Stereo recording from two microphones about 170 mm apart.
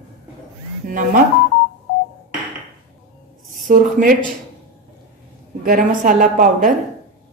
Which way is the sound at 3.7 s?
50° right (ahead or behind).